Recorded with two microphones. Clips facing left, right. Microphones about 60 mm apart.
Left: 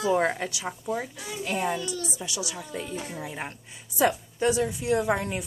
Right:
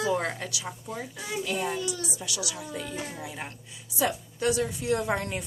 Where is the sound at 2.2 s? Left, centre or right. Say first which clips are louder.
Left 1 dB; left.